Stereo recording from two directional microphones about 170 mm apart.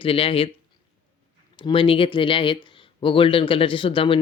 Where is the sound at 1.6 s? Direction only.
30° left (ahead or behind).